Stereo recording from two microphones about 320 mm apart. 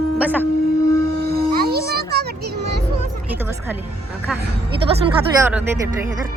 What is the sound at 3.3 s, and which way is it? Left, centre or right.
Music, centre.